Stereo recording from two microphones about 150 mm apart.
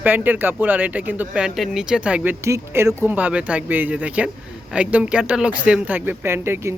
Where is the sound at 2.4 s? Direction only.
20° right (ahead or behind).